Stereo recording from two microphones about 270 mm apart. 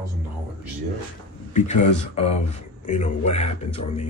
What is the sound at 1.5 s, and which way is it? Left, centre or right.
Speech, left.